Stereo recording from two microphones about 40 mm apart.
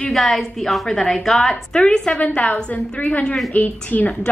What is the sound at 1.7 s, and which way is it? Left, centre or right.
Speech, centre.